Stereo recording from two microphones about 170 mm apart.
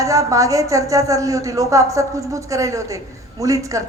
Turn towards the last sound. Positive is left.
turn(degrees=-20)  # may be behind; listen again after turning